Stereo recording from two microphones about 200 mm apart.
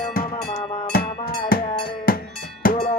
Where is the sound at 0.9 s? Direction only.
50° left (ahead or behind).